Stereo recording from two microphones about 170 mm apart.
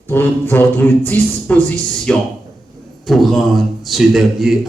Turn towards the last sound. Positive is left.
turn(degrees=0)  # may be behind; listen again after turning